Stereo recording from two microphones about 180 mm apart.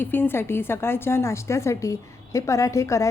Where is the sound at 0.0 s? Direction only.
10° left (ahead or behind).